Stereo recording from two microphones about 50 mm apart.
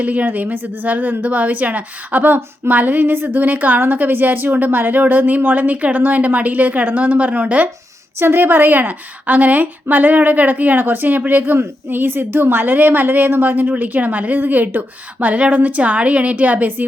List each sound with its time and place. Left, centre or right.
0.0 s speech: right
8.2 s speech: right